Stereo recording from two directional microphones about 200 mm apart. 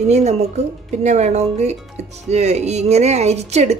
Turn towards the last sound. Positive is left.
turn(degrees=-35)  # may be behind; listen again after turning